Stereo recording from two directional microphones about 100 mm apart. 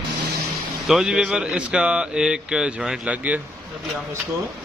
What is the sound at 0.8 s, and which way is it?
Speech, 5° right (ahead or behind).